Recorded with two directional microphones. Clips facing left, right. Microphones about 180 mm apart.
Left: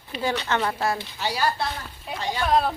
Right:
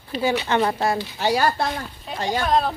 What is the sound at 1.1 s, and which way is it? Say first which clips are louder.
Speech: right 5 dB; 50° right (ahead or behind).